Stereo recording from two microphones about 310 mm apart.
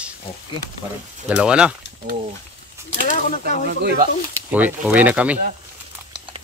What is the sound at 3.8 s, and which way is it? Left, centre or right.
Speech, right.